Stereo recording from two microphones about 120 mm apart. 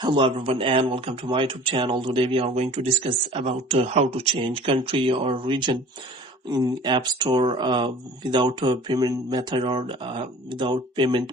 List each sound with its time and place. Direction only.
0.0 s speech: 45° right (ahead or behind)
3.0 s speech: 45° right (ahead or behind)